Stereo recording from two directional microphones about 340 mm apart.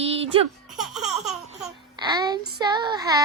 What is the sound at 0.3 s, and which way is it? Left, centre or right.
Child singing, centre.